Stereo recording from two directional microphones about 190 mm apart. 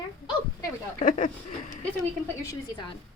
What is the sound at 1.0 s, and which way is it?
Speech, 40° left (ahead or behind).